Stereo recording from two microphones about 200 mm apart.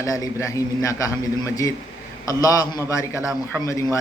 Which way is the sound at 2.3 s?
15° left (ahead or behind).